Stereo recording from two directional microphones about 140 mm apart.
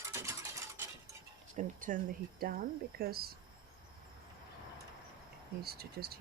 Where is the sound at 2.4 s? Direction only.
90° right.